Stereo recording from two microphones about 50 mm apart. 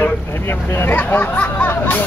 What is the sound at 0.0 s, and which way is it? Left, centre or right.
Speech, left.